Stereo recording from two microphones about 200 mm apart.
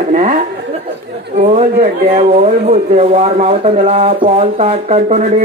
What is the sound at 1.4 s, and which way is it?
Speech, 35° right (ahead or behind).